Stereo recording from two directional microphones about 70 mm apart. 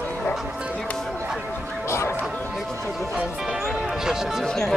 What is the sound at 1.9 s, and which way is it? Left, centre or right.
Music, left.